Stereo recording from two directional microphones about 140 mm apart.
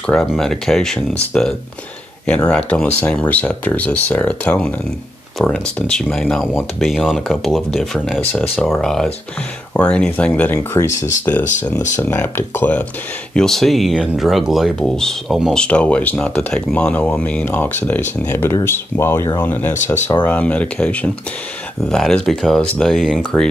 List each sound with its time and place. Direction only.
0.0 s speech: 5° left (ahead or behind)